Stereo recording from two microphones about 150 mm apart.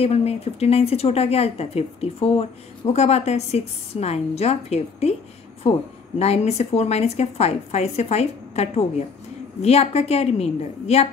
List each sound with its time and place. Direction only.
0.0 s speech: 45° left (ahead or behind)